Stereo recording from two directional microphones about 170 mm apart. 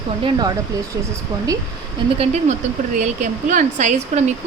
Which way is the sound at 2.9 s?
50° right (ahead or behind).